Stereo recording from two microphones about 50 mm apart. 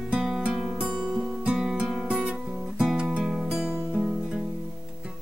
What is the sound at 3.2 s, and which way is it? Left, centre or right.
Music, centre.